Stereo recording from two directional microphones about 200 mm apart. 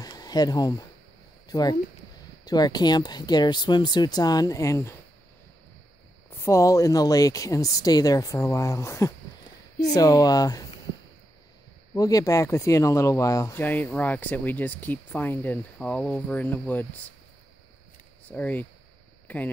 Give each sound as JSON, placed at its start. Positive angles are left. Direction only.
{"t": 0.0, "sound": "a sound", "side_deg": 20}
{"t": 1.5, "sound": "speech", "side_deg": 20}
{"t": 6.3, "sound": "speech", "side_deg": 15}
{"t": 11.9, "sound": "speech", "side_deg": 15}
{"t": 18.3, "sound": "speech", "side_deg": 10}